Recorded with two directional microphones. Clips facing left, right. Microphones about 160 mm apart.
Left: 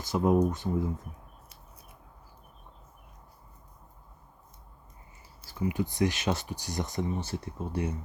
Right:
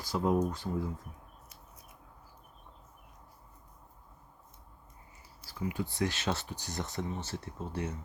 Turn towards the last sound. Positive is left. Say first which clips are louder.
# left 4 dB
turn(degrees=15)  # may be behind; listen again after turning